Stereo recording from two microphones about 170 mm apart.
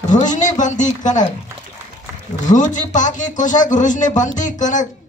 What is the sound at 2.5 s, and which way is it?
Speech, 50° left (ahead or behind).